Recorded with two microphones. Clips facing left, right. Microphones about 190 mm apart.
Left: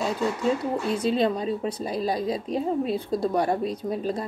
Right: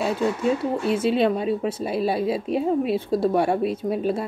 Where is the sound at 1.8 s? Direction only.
10° right (ahead or behind).